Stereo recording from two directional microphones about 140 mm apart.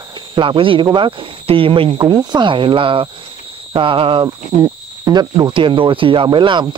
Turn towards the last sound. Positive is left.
turn(degrees=-35)  # may be behind; listen again after turning